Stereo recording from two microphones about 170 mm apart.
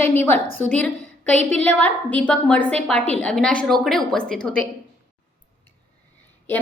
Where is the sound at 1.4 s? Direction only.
40° right (ahead or behind).